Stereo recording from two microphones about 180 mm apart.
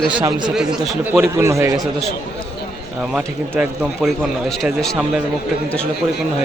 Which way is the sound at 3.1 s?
5° right (ahead or behind).